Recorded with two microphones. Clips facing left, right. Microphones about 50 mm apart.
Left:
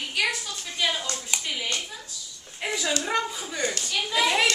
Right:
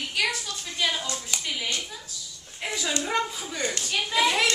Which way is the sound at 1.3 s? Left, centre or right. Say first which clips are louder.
Left 2 dB; centre.